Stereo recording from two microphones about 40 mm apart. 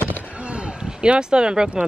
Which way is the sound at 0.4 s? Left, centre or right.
Right.